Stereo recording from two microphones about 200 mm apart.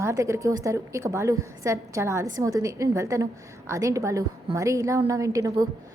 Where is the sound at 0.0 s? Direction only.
15° right (ahead or behind).